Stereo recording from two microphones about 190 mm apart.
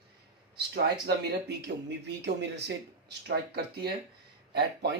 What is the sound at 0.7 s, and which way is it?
Speech, 60° right (ahead or behind).